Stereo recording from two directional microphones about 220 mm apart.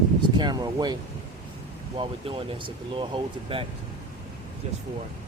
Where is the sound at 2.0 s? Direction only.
25° right (ahead or behind).